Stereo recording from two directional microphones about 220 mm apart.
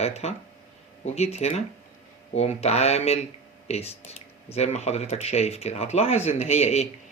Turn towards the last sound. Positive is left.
turn(degrees=30)  # may be behind; listen again after turning